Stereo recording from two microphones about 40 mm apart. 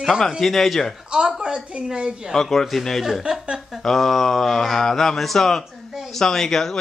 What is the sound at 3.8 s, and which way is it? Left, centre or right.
A man's voice, centre.